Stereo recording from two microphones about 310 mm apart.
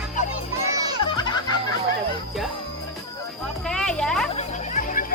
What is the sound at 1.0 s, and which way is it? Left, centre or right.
Music, centre.